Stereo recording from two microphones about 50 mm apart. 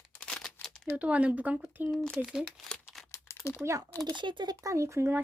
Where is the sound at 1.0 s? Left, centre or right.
Right.